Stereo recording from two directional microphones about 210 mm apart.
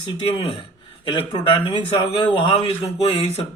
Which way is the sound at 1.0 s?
20° left (ahead or behind).